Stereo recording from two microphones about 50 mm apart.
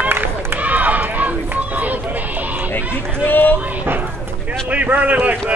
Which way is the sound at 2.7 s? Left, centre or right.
Left.